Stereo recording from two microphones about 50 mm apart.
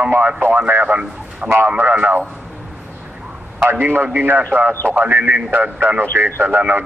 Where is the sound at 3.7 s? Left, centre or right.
Right.